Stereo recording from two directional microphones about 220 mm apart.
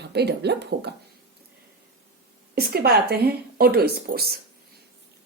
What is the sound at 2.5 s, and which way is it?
Speech, 45° right (ahead or behind).